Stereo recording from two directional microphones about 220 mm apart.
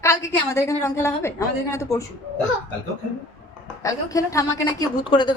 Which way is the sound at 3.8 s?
15° left (ahead or behind).